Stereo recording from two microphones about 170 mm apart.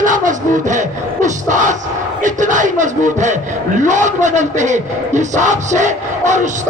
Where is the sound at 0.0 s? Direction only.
50° right (ahead or behind).